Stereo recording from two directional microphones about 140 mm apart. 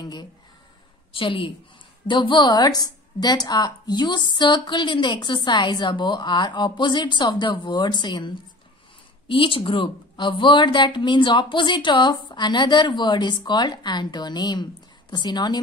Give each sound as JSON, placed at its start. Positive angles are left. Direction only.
{"t": 0.0, "sound": "a sound", "side_deg": 30}
{"t": 1.1, "sound": "a woman's voice", "side_deg": 40}
{"t": 9.3, "sound": "a woman's voice", "side_deg": 40}